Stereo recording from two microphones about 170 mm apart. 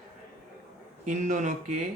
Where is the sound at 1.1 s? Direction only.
45° right (ahead or behind).